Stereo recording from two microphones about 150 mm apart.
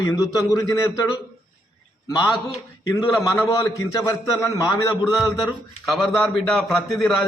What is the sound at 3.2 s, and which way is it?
A man's voice, 20° left (ahead or behind).